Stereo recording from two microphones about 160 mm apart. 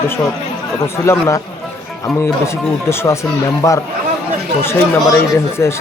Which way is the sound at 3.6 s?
20° left (ahead or behind).